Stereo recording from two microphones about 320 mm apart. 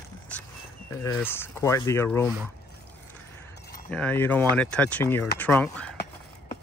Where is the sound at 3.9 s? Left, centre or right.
Centre.